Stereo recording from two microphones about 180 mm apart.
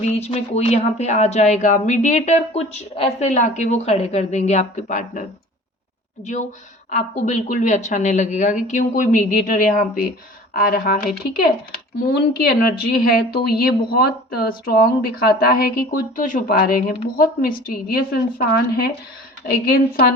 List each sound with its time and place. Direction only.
0.0 s speech: 35° left (ahead or behind)
6.9 s a woman's voice: 45° left (ahead or behind)
10.5 s speech: 55° left (ahead or behind)